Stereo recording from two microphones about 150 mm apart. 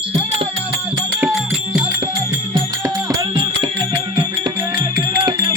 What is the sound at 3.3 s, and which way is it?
Music, 35° right (ahead or behind).